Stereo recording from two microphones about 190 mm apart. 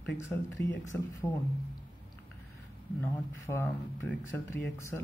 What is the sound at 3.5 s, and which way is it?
Speech, 10° left (ahead or behind).